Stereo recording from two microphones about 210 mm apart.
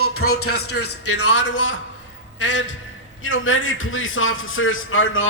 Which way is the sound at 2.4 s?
60° left (ahead or behind).